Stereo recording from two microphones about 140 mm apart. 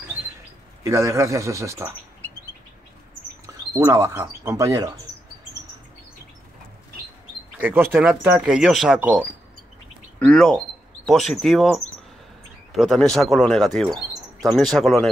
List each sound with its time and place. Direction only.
0.8 s speech: 20° right (ahead or behind)
3.4 s speech: 20° right (ahead or behind)
7.5 s speech: 10° right (ahead or behind)
10.1 s speech: 5° left (ahead or behind)